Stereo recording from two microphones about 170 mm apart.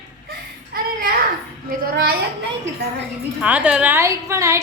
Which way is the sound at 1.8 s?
60° right (ahead or behind).